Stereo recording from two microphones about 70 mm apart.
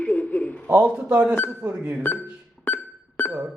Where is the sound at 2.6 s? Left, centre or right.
Left.